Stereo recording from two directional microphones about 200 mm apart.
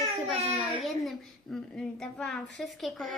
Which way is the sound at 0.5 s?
Centre (ahead or behind).